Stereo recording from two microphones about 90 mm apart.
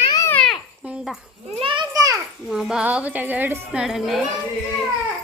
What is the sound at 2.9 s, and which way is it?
Speech, 15° right (ahead or behind).